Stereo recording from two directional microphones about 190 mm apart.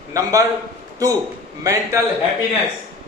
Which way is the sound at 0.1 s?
15° right (ahead or behind).